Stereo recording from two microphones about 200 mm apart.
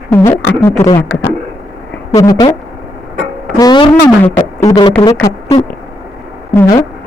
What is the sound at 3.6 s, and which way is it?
Speech, 20° left (ahead or behind).